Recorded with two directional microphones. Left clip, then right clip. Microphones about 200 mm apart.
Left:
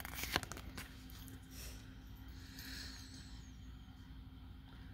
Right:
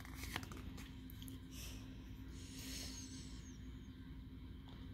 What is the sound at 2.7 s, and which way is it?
Vehicle, 5° left (ahead or behind).